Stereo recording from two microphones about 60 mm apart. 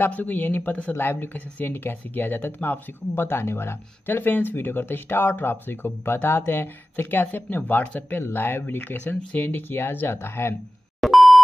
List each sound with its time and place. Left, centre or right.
0.1 s speech: left
11.0 s beep: centre